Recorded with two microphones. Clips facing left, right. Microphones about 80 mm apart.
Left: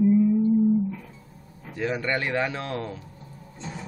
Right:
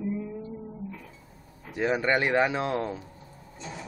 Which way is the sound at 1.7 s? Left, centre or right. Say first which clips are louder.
Right 2 dB; centre.